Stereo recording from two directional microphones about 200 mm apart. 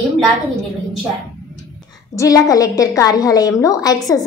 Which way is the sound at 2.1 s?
15° left (ahead or behind).